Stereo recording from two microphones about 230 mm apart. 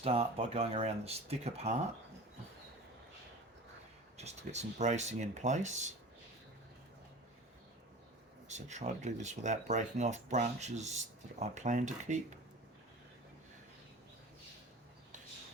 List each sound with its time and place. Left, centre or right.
0.0 s speech: right
4.2 s speech: right
8.4 s speech: right